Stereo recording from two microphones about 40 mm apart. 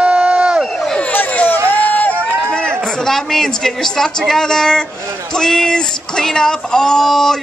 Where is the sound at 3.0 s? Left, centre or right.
Centre.